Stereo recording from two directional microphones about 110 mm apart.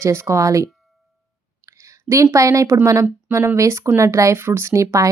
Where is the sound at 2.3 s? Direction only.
30° right (ahead or behind).